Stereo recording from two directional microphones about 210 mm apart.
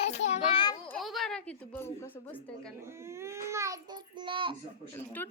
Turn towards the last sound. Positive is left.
turn(degrees=10)  # may be behind; listen again after turning